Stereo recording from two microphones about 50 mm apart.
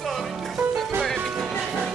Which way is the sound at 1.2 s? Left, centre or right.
Centre.